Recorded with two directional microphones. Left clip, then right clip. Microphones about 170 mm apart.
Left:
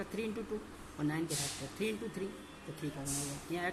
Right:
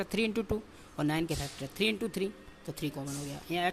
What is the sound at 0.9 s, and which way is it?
Speech, 60° right (ahead or behind).